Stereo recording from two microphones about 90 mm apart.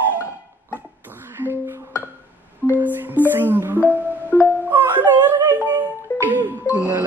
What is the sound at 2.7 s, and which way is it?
Music, 20° right (ahead or behind).